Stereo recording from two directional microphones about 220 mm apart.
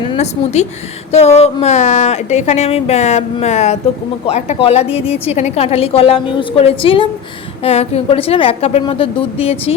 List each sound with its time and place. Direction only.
0.1 s a woman's voice: 30° left (ahead or behind)